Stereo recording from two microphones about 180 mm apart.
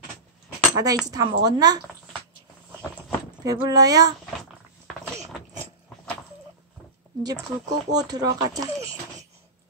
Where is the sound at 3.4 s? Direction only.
20° right (ahead or behind).